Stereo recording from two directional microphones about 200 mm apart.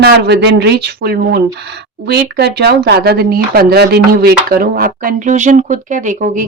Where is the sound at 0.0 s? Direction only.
60° right (ahead or behind).